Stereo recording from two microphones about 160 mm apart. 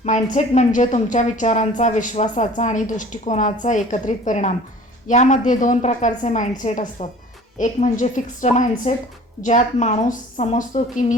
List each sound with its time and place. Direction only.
0.0 s speech: 45° left (ahead or behind)